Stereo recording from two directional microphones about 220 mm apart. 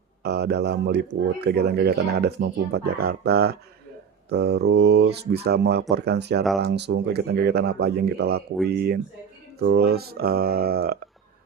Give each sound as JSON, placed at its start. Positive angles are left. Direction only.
{"t": 0.2, "sound": "speech", "side_deg": -50}